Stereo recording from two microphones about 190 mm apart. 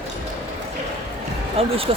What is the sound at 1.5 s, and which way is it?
Speech, 30° right (ahead or behind).